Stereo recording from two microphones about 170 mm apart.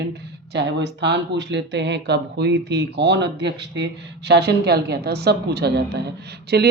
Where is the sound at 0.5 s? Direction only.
90° right.